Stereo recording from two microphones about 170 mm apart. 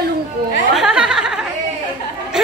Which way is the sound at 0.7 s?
5° right (ahead or behind).